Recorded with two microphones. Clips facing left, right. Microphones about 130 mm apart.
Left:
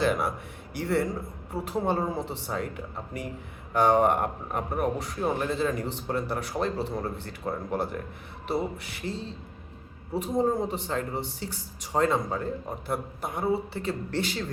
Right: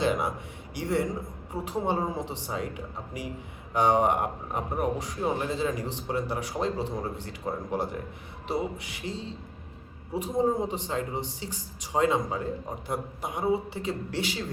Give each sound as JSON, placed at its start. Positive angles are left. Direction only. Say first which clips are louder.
{"t": 0.8, "sound": "a man's voice", "louder": "left 1 dB", "side_deg": -15}
{"t": 3.8, "sound": "a man's voice", "louder": "left 1 dB", "side_deg": -15}